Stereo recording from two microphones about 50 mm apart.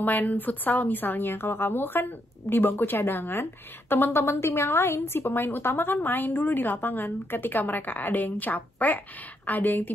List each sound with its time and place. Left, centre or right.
0.0 s a woman's voice: left
4.2 s a woman's voice: left